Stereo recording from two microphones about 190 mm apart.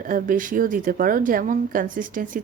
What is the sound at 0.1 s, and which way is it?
Speech, 45° right (ahead or behind).